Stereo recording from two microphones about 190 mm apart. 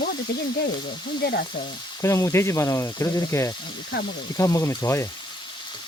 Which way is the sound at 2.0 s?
15° left (ahead or behind).